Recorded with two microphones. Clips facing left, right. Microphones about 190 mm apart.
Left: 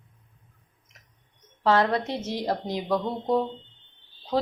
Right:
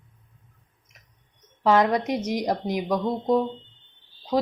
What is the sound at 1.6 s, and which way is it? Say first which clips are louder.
A woman's voice: right 2 dB; 15° right (ahead or behind).